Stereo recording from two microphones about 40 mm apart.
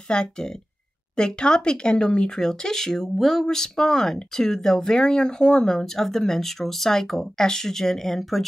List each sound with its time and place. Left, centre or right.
0.1 s speech: centre